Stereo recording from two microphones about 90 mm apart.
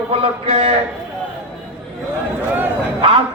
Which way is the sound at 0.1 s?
90° right.